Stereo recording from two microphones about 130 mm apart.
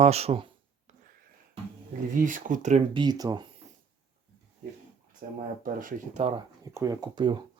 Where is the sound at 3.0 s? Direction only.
30° right (ahead or behind).